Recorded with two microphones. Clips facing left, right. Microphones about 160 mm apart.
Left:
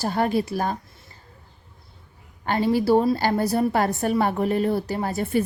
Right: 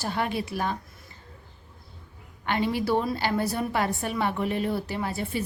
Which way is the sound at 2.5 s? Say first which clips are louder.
Left 6 dB; 40° left (ahead or behind).